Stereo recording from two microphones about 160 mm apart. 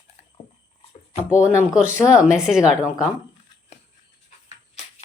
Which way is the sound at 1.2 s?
10° right (ahead or behind).